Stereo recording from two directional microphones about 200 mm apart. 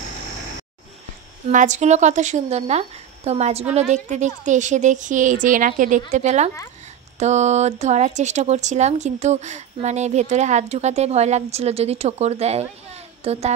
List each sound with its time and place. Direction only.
1.5 s speech: 40° right (ahead or behind)